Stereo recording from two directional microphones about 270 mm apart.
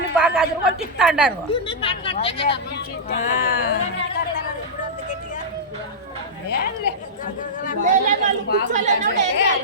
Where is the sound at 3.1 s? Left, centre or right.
Left.